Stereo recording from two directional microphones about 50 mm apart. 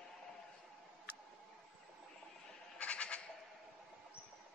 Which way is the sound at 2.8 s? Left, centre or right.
Left.